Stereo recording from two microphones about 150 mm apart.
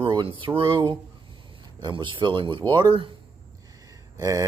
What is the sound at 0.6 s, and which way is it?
Speech, 30° right (ahead or behind).